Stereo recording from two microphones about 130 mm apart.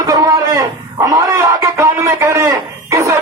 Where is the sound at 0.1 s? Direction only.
30° right (ahead or behind).